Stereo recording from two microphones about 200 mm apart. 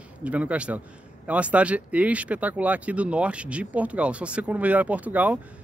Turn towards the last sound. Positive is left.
turn(degrees=-5)  # may be behind; listen again after turning